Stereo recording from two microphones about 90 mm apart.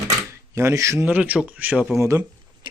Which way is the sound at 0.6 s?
35° right (ahead or behind).